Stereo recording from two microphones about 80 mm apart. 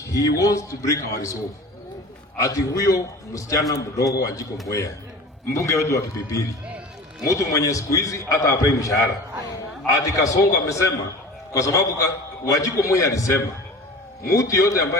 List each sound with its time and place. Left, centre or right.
0.0 s a man's voice: left
2.4 s a man's voice: left